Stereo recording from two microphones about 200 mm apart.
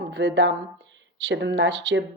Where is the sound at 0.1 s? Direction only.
65° right (ahead or behind).